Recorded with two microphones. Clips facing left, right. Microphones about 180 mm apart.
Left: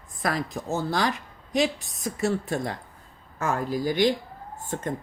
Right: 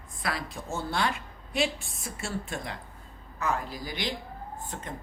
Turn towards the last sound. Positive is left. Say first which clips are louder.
# left 7 dB
turn(degrees=45)  # may be behind; listen again after turning